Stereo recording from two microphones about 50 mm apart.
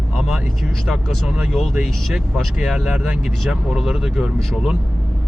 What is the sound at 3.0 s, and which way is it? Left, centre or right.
Speech, right.